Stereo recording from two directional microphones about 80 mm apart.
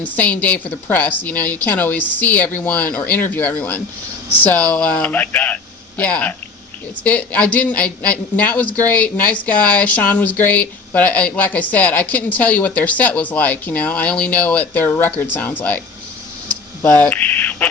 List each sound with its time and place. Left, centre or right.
0.0 s a man's voice: centre
16.8 s a man's voice: centre